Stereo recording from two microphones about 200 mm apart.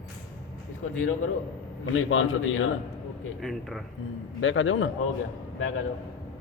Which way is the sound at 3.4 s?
Centre (ahead or behind).